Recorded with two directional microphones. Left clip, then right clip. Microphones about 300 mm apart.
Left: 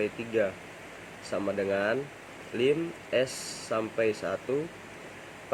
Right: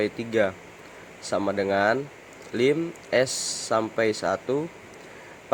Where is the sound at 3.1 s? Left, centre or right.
Right.